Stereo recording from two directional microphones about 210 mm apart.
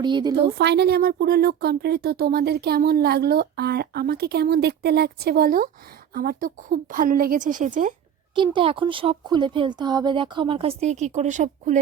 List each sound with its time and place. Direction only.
0.0 s speech: 20° right (ahead or behind)
0.4 s a woman's voice: 50° right (ahead or behind)
8.4 s speech: 25° right (ahead or behind)